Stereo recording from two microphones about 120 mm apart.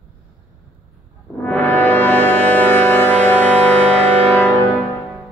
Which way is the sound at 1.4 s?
15° left (ahead or behind).